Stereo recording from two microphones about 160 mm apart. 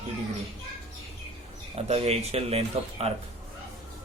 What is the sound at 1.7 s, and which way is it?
Speech, 40° right (ahead or behind).